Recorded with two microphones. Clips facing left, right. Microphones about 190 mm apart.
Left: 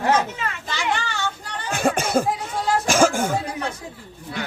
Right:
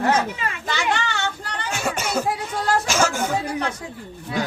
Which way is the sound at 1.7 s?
55° left (ahead or behind).